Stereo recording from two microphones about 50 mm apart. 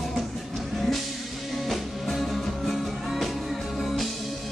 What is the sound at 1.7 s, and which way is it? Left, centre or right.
Music, centre.